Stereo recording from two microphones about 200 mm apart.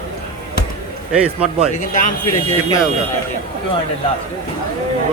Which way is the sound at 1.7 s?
40° left (ahead or behind).